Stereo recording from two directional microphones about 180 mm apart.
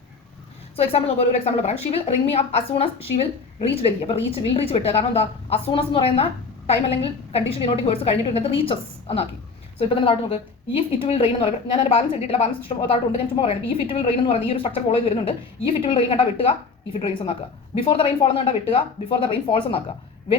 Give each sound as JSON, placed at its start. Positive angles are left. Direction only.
{"t": 0.8, "sound": "a woman's voice", "side_deg": 35}